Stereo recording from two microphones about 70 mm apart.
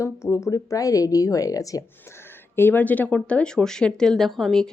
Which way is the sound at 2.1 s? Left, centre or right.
Left.